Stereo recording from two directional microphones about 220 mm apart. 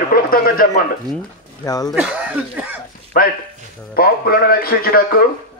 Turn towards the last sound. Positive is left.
turn(degrees=40)  # may be behind; listen again after turning